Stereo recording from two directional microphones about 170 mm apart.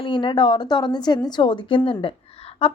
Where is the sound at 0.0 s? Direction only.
30° left (ahead or behind).